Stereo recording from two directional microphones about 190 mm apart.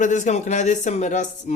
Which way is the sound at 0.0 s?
40° left (ahead or behind).